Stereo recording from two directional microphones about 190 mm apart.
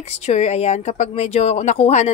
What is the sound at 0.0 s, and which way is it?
Speech, 35° left (ahead or behind).